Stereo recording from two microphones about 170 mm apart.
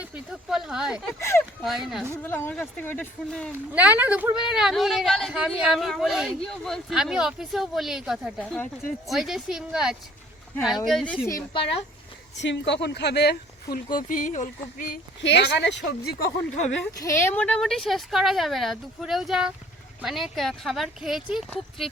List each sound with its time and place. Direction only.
0.0 s a woman's voice: 5° right (ahead or behind)
1.2 s speech: 15° left (ahead or behind)
1.6 s a woman's voice: centre (ahead or behind)
2.2 s speech: 15° left (ahead or behind)
3.7 s a woman's voice: 10° right (ahead or behind)
11.3 s speech: 20° left (ahead or behind)
12.4 s speech: 90° left; by 13.7 s 75° left (ahead or behind)
13.9 s speech: 50° left (ahead or behind)
15.2 s speech: 90° left
17.0 s a woman's voice: 15° left (ahead or behind); by 21.8 s 5° right (ahead or behind)